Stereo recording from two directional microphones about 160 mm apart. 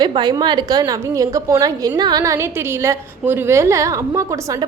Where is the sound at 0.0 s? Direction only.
25° right (ahead or behind).